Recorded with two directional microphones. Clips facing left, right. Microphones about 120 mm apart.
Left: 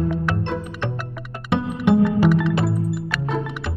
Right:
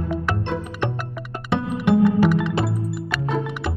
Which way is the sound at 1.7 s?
Centre (ahead or behind).